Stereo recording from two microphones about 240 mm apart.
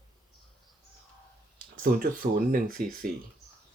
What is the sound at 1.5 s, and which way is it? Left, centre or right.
Speech, right.